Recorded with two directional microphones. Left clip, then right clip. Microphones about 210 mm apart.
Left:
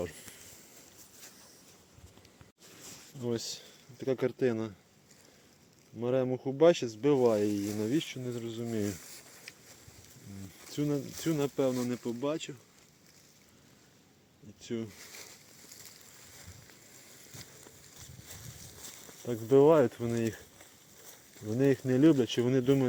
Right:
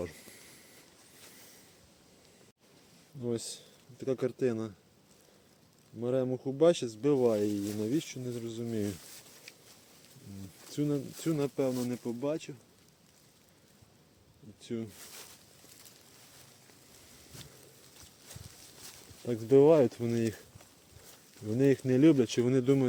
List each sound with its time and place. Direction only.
3.2 s speech: centre (ahead or behind)
6.0 s speech: centre (ahead or behind)
10.7 s speech: 10° right (ahead or behind)
14.6 s speech: centre (ahead or behind)
19.2 s speech: 25° right (ahead or behind)
21.5 s speech: 20° right (ahead or behind)